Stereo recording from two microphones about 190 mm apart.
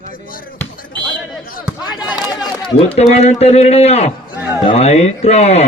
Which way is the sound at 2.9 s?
35° left (ahead or behind).